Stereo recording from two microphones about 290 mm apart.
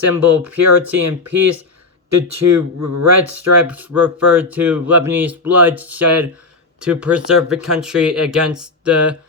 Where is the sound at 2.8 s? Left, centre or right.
Right.